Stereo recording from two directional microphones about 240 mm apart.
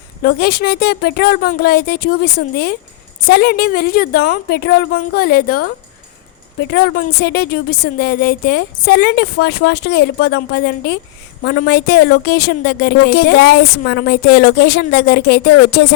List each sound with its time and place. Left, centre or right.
0.2 s a woman's voice: left